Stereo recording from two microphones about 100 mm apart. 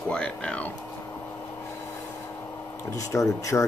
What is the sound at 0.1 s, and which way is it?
Speech, 10° left (ahead or behind).